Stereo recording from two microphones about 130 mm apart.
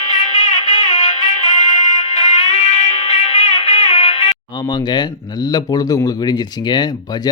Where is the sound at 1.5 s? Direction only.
60° left (ahead or behind).